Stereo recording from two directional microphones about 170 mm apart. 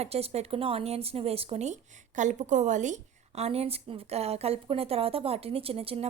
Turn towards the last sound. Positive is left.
turn(degrees=-35)  # may be behind; listen again after turning